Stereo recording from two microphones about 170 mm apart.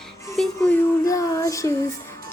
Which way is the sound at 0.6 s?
15° left (ahead or behind).